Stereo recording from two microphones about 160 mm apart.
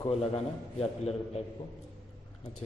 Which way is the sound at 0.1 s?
40° left (ahead or behind).